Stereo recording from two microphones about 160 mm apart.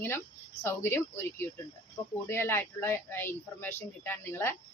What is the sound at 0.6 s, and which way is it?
Speech, 15° left (ahead or behind).